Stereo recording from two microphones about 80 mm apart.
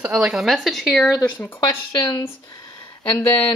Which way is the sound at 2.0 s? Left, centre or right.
Left.